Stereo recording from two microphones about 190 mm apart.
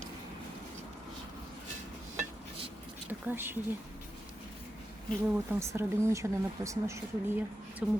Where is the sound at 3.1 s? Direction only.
10° right (ahead or behind).